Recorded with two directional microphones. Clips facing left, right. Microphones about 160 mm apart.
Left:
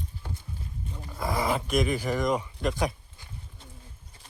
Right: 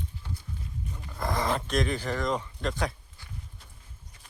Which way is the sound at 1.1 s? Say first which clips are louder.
Left 1 dB; 5° left (ahead or behind).